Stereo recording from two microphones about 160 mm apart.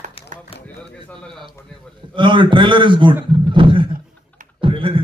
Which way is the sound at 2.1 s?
30° right (ahead or behind).